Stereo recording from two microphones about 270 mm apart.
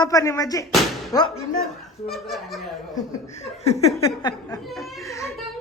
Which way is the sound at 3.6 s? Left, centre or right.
Left.